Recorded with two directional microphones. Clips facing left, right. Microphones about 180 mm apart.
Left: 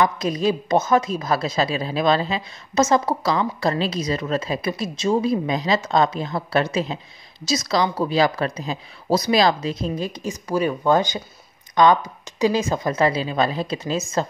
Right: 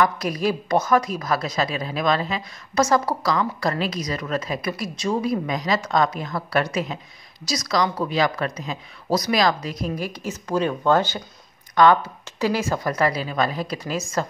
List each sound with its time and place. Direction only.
0.0 s a woman's voice: 20° left (ahead or behind)